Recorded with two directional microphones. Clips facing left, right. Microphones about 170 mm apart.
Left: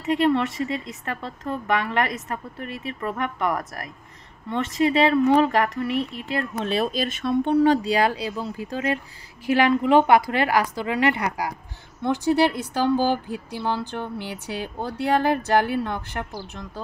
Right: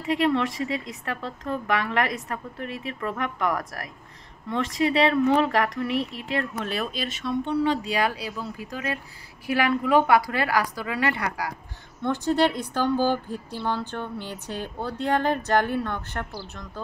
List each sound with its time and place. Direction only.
0.0 s speech: centre (ahead or behind)
6.6 s a woman's voice: 25° left (ahead or behind)
6.9 s speech: 50° left (ahead or behind)
7.8 s a woman's voice: 30° left (ahead or behind); by 16.3 s 10° left (ahead or behind)